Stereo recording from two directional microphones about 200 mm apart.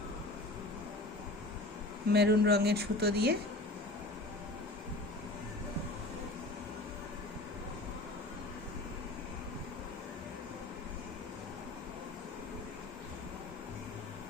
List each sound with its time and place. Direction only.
2.1 s speech: 55° right (ahead or behind)